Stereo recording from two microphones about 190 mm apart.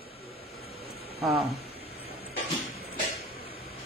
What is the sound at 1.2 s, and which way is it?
Speech, centre (ahead or behind).